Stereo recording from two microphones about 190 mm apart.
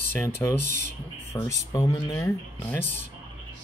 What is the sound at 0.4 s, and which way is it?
Speech, 15° left (ahead or behind).